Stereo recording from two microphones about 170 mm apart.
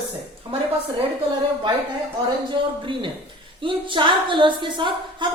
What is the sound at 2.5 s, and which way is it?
A woman's voice, 30° right (ahead or behind).